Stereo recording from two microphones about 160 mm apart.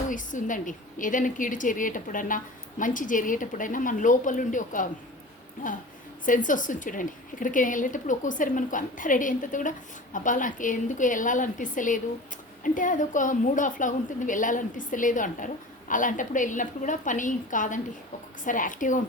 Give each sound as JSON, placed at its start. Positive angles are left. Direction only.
{"t": 0.1, "sound": "a woman's voice", "side_deg": 55}
{"t": 6.2, "sound": "a woman's voice", "side_deg": 55}